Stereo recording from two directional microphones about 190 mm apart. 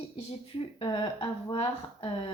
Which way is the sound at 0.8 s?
25° left (ahead or behind).